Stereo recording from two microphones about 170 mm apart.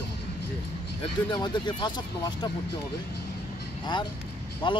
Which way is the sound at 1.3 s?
25° left (ahead or behind).